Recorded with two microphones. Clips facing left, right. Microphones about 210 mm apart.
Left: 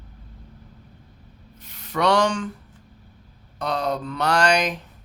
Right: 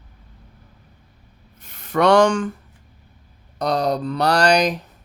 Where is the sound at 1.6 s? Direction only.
50° right (ahead or behind).